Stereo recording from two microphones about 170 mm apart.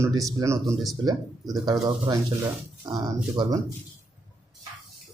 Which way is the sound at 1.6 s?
25° right (ahead or behind).